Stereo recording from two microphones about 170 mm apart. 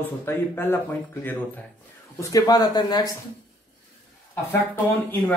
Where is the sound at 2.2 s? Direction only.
20° left (ahead or behind).